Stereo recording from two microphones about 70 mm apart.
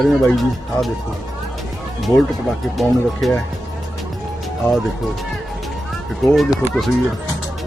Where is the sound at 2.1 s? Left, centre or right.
Left.